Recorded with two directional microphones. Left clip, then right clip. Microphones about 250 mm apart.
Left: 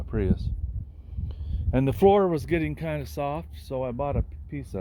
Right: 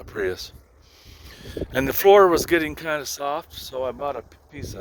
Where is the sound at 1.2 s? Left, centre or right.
Right.